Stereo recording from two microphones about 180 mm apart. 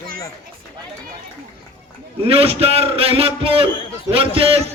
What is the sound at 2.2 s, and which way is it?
A man's voice, 35° right (ahead or behind).